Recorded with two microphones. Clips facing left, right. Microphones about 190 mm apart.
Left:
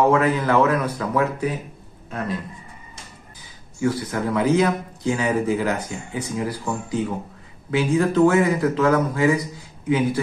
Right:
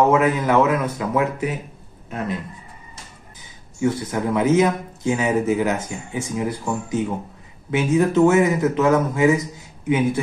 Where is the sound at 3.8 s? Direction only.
20° right (ahead or behind).